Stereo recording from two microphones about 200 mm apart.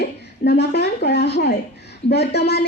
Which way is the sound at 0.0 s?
55° left (ahead or behind).